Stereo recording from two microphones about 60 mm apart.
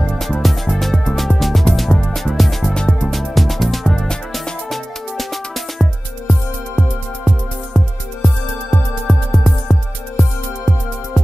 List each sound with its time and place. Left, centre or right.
0.2 s music: centre
2.7 s music: centre
3.1 s music: centre
8.6 s music: centre
9.7 s music: left